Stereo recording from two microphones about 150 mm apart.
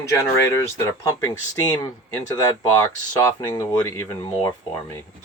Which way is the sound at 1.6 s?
20° left (ahead or behind).